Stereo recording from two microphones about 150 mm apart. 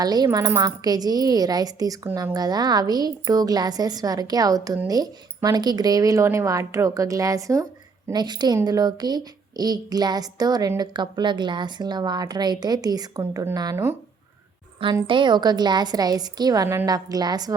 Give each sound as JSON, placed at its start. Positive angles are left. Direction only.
{"t": 0.0, "sound": "speech", "side_deg": -25}
{"t": 15.0, "sound": "speech", "side_deg": -35}